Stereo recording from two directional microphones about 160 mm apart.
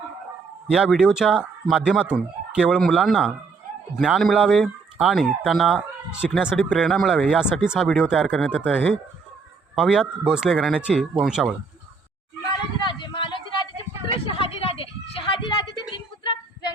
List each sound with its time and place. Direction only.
0.7 s speech: 5° right (ahead or behind)
9.7 s speech: 5° right (ahead or behind)
12.5 s a sound: 30° left (ahead or behind)
16.2 s child singing: 30° left (ahead or behind)